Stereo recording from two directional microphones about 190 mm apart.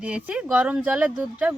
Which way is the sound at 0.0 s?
5° right (ahead or behind).